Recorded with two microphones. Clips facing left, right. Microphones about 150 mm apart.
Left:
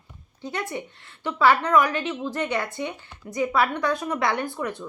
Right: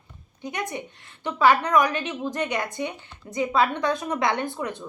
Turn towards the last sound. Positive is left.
turn(degrees=-20)  # may be behind; listen again after turning